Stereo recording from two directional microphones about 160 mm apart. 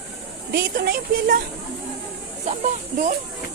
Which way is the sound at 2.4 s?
50° right (ahead or behind).